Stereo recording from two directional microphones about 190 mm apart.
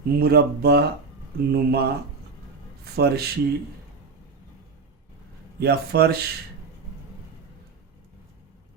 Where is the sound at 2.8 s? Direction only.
55° right (ahead or behind).